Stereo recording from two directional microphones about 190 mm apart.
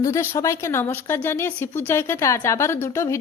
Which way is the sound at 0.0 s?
15° left (ahead or behind).